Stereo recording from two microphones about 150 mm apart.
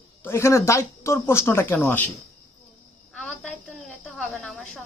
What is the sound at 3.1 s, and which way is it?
Cricket, 5° left (ahead or behind).